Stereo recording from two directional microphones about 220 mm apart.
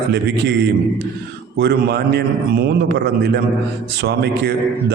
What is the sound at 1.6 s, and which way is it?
A man's voice, 50° right (ahead or behind).